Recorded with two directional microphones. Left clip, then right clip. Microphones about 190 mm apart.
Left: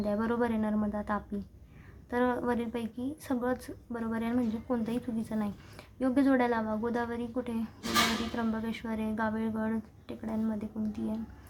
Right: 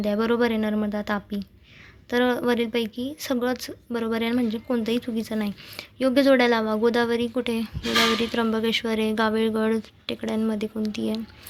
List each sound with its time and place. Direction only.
0.0 s a woman's voice: 30° right (ahead or behind)